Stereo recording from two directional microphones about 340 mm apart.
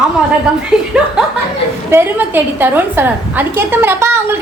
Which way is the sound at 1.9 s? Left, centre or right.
Centre.